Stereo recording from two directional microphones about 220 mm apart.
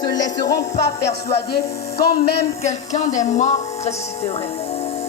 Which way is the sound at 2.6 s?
30° left (ahead or behind).